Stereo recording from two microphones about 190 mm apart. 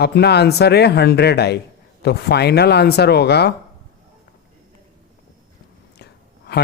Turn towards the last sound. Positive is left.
turn(degrees=60)  # may be behind; listen again after turning